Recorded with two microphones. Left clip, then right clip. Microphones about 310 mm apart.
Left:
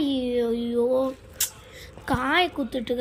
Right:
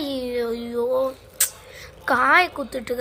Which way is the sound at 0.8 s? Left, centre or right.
Right.